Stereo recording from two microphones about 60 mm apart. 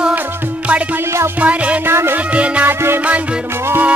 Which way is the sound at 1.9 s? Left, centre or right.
Right.